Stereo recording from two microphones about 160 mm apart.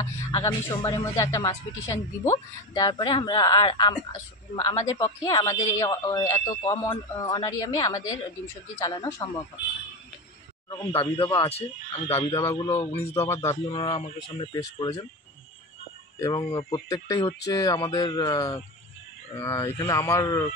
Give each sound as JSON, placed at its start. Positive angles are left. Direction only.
{"t": 0.0, "sound": "speech", "side_deg": 30}
{"t": 10.7, "sound": "speech", "side_deg": 30}
{"t": 12.4, "sound": "speech", "side_deg": 20}
{"t": 12.7, "sound": "speech", "side_deg": 35}
{"t": 13.3, "sound": "speech", "side_deg": 15}
{"t": 13.7, "sound": "speech", "side_deg": 35}
{"t": 14.6, "sound": "speech", "side_deg": 20}
{"t": 16.2, "sound": "speech", "side_deg": 20}